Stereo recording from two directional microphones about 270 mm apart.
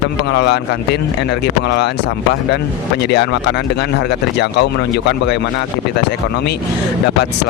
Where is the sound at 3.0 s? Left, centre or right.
Left.